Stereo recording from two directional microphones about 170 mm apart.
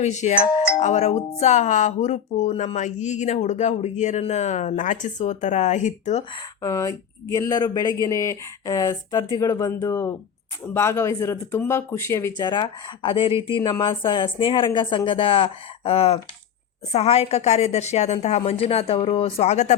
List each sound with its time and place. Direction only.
0.0 s speech: 45° left (ahead or behind)
6.6 s speech: 20° left (ahead or behind)
12.5 s a woman's voice: 25° left (ahead or behind)